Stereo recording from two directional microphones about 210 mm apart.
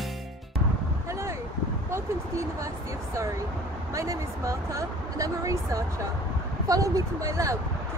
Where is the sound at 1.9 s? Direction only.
15° right (ahead or behind).